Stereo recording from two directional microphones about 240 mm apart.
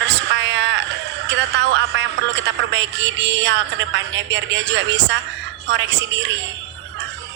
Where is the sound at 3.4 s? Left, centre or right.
Right.